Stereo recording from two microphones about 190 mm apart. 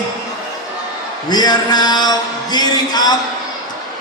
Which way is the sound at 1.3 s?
20° left (ahead or behind).